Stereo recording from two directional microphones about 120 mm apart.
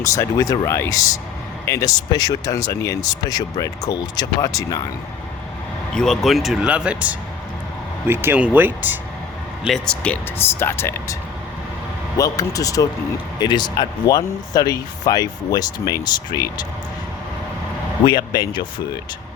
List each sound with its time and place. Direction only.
0.0 s speech: 25° left (ahead or behind)
5.9 s speech: 5° left (ahead or behind); by 9.0 s 15° right (ahead or behind)
9.6 s speech: 5° left (ahead or behind); by 16.6 s 35° left (ahead or behind)
18.0 s speech: 35° left (ahead or behind)